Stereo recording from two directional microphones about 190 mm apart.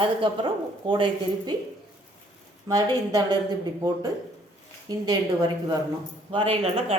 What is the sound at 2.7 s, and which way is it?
A woman's voice, 20° right (ahead or behind).